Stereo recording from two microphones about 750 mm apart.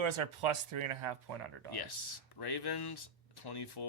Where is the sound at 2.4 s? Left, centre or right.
Left.